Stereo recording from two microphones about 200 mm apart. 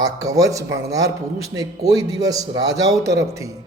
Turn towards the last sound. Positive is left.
turn(degrees=-15)  # may be behind; listen again after turning